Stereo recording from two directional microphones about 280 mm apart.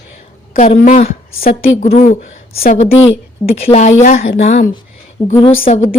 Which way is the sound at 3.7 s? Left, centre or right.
Left.